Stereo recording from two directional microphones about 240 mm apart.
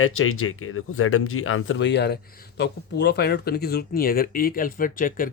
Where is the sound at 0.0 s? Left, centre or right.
Left.